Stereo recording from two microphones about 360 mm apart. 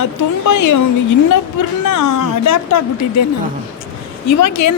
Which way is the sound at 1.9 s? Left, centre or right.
Left.